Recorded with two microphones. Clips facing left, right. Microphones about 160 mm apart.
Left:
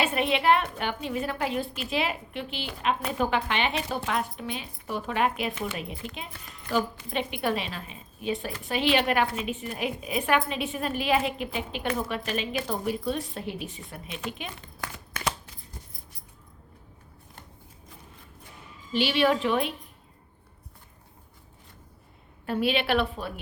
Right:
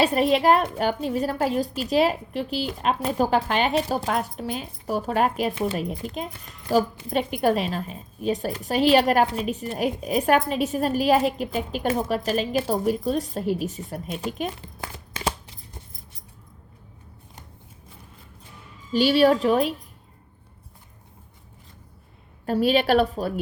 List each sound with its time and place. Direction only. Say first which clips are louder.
0.0 s a woman's voice: right 6 dB; 35° right (ahead or behind)
14.8 s a sound: right 2 dB; 30° right (ahead or behind)
18.9 s a woman's voice: right 6 dB; 40° right (ahead or behind)
22.4 s a woman's voice: right 6 dB; 40° right (ahead or behind)